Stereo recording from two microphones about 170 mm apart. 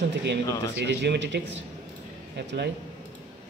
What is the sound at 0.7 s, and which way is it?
Speech, 80° right.